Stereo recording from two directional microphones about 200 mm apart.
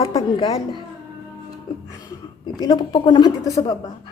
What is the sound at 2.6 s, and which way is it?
A woman's voice, 25° left (ahead or behind).